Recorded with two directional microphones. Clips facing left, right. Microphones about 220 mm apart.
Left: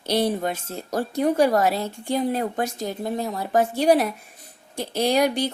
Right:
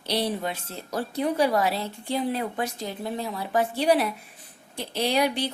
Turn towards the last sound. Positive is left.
turn(degrees=45)  # may be behind; listen again after turning